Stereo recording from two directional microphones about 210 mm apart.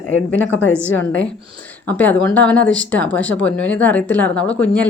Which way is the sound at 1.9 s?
10° left (ahead or behind).